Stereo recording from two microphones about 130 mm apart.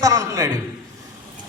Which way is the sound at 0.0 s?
25° right (ahead or behind).